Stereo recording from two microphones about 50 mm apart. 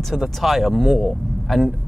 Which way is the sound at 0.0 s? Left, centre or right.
Centre.